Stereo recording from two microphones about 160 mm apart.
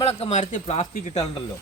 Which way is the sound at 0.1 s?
45° left (ahead or behind).